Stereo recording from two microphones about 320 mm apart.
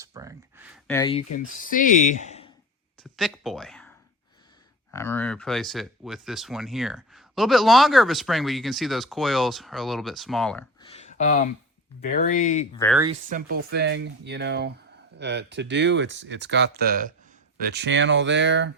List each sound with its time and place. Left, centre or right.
0.0 s a sound: centre
0.9 s speech: centre
1.3 s speech: left
3.0 s speech: centre
10.8 s a sound: centre
12.0 s speech: left
13.2 s speech: right